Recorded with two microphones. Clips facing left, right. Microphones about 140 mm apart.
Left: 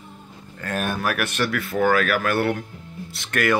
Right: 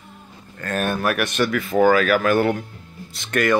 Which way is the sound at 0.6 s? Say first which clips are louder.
Right 3 dB; 10° left (ahead or behind).